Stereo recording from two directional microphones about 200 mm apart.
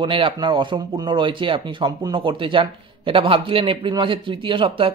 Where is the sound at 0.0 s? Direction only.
25° right (ahead or behind).